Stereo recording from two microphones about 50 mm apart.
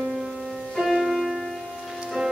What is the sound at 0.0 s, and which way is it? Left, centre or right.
Music, centre.